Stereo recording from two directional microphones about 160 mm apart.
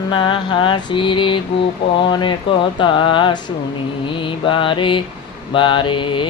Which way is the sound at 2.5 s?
30° left (ahead or behind).